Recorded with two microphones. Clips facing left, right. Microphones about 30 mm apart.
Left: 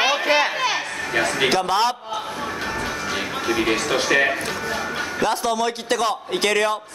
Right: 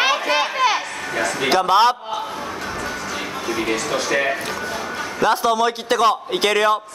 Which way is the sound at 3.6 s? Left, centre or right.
Left.